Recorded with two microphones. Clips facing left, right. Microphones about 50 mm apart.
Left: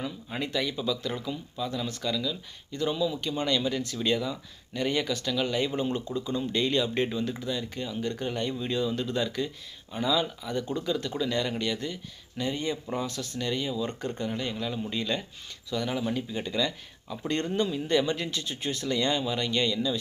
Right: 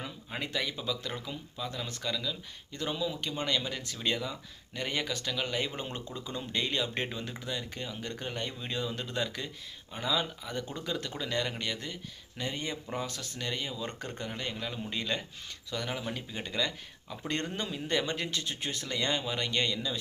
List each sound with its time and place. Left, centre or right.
0.3 s speech: right
9.0 s speech: right